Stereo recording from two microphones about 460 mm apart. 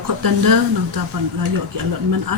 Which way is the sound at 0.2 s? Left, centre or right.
Right.